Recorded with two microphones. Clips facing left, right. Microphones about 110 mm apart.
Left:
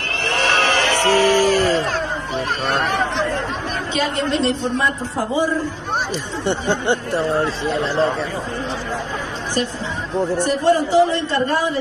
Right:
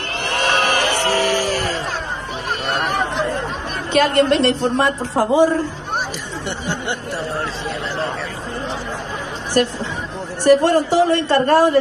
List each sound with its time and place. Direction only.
0.6 s music: 15° right (ahead or behind)
1.4 s a sound: 20° left (ahead or behind)
2.7 s a sound: 5° right (ahead or behind)
3.9 s a woman's voice: 65° right (ahead or behind)
6.4 s speech: 25° left (ahead or behind)
9.6 s speech: 60° right (ahead or behind)